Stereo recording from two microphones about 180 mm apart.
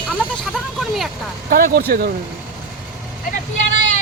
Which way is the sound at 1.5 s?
55° right (ahead or behind).